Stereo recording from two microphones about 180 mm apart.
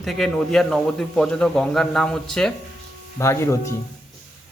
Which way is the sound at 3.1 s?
15° left (ahead or behind).